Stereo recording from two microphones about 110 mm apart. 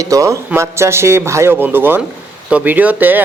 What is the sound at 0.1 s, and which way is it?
A man's voice, 30° right (ahead or behind).